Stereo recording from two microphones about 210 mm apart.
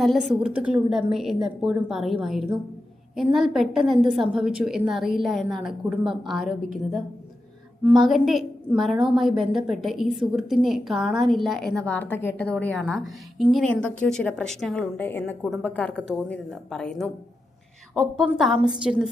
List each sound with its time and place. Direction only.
0.0 s a woman's voice: centre (ahead or behind)
8.0 s a woman's voice: centre (ahead or behind)
18.2 s a woman's voice: centre (ahead or behind)